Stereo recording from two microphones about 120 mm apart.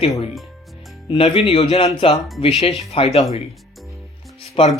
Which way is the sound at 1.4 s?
55° left (ahead or behind).